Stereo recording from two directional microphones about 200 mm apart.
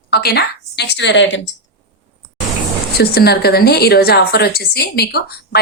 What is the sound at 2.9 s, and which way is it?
A woman's voice, 55° left (ahead or behind).